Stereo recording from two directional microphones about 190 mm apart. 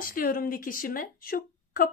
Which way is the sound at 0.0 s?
50° left (ahead or behind).